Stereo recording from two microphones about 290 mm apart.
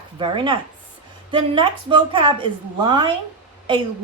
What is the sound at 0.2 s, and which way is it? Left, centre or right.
Speech, centre.